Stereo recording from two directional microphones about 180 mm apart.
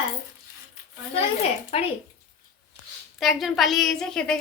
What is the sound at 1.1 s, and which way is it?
Speech, 35° left (ahead or behind).